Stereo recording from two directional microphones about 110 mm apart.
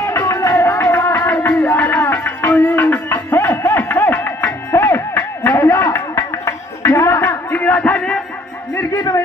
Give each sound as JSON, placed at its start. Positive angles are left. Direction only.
{"t": 0.0, "sound": "music", "side_deg": 25}
{"t": 1.3, "sound": "music", "side_deg": 10}
{"t": 5.9, "sound": "a sound", "side_deg": 25}
{"t": 8.7, "sound": "music", "side_deg": 30}